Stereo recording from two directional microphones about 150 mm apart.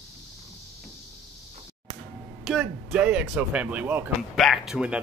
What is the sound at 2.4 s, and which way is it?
Speech, centre (ahead or behind).